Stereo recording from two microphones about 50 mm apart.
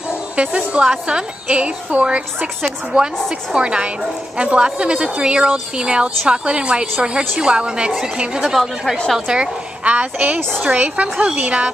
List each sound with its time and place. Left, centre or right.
0.4 s a woman's voice: right